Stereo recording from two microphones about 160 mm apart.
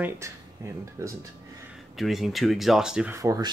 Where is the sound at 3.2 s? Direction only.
20° right (ahead or behind).